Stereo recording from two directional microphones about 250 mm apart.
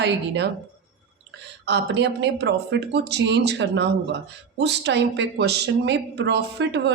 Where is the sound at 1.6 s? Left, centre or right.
Right.